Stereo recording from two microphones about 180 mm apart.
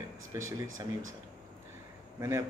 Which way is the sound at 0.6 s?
90° right.